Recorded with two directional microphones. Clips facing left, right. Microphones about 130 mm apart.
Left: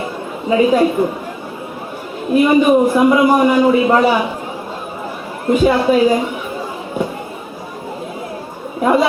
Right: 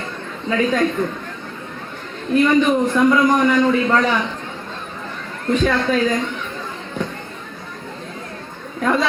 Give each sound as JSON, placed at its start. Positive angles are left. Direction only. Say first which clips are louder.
{"t": 0.0, "sound": "chatter", "louder": "left 5 dB", "side_deg": 10}
{"t": 2.2, "sound": "a man's voice", "louder": "left 4 dB", "side_deg": 10}
{"t": 5.5, "sound": "a man's voice", "louder": "left 5 dB", "side_deg": 10}
{"t": 8.8, "sound": "chatter", "louder": "left 5 dB", "side_deg": 15}